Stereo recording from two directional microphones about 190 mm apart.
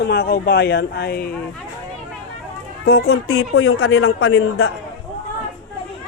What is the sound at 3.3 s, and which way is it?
A man's voice, 90° left.